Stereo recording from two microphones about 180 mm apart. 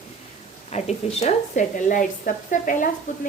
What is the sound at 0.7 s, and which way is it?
A woman's voice, 40° left (ahead or behind).